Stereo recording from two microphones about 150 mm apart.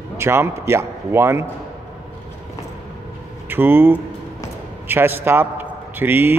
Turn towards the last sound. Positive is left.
turn(degrees=-15)  # may be behind; listen again after turning